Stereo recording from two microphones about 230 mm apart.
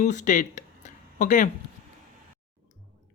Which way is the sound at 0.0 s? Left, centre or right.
Left.